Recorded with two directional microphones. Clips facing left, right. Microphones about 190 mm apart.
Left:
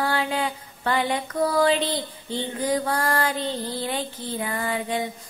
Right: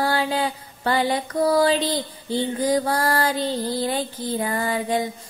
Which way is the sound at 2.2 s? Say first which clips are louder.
Right 4 dB; 35° right (ahead or behind).